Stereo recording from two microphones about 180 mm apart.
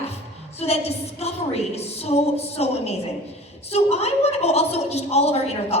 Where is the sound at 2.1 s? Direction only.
35° left (ahead or behind).